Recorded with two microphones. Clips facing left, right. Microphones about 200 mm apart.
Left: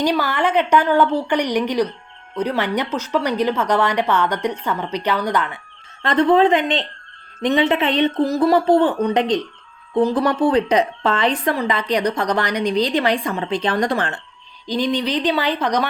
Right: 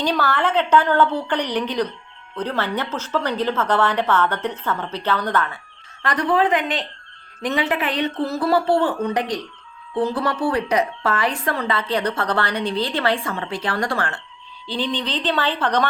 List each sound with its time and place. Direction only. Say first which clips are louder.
0.0 s a woman's voice: left 2 dB; 10° left (ahead or behind)